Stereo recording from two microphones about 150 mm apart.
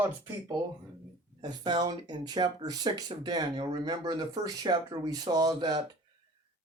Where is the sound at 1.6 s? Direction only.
30° right (ahead or behind).